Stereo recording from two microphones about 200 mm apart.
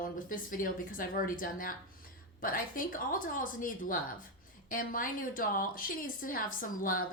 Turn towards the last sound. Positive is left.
turn(degrees=45)  # may be behind; listen again after turning